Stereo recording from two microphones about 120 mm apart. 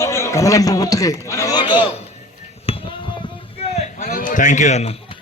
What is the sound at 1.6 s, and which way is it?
Speech, 45° left (ahead or behind).